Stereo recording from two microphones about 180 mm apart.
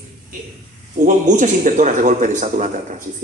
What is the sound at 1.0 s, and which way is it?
A man's voice, 45° right (ahead or behind).